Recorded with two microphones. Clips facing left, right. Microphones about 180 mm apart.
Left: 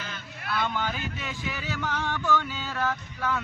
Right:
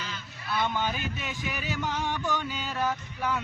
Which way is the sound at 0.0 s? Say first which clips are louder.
Left 1 dB; 55° left (ahead or behind).